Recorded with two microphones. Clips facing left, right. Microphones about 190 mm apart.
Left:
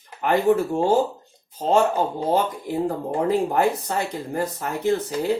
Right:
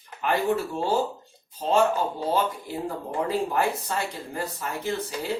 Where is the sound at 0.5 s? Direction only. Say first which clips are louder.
Left 6 dB; 50° left (ahead or behind).